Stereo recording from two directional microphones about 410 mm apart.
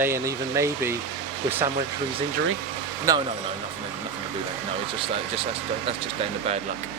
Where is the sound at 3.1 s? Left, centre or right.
Centre.